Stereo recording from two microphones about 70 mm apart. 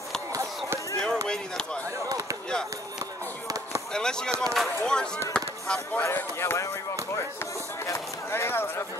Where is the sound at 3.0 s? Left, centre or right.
Right.